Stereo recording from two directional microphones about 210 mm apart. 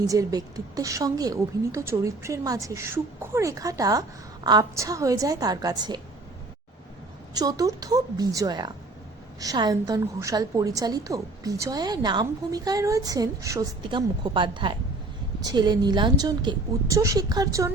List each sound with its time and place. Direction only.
0.0 s a woman's voice: 15° right (ahead or behind)
7.3 s a woman's voice: 20° right (ahead or behind)